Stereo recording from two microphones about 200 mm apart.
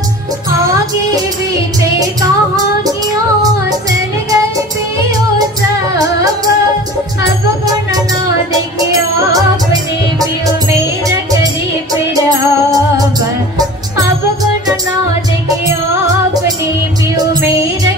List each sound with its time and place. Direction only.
11.1 s music: 20° right (ahead or behind)
17.2 s music: 20° right (ahead or behind)